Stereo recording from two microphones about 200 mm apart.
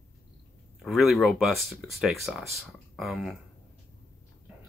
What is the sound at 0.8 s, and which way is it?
Speech, centre (ahead or behind).